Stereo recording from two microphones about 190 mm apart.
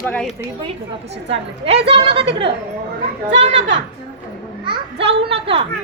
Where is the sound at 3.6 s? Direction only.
70° right (ahead or behind).